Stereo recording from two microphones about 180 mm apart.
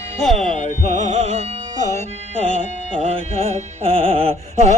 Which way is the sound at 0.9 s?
40° right (ahead or behind).